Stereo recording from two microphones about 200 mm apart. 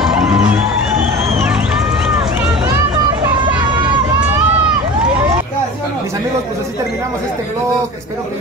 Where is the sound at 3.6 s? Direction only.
25° right (ahead or behind).